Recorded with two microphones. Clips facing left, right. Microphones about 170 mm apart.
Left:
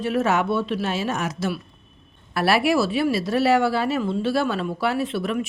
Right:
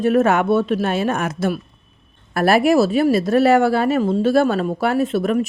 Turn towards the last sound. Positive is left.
turn(degrees=-45)  # may be behind; listen again after turning